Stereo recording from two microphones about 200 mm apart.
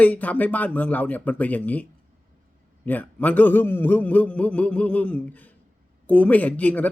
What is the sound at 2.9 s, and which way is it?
Speech, 10° left (ahead or behind).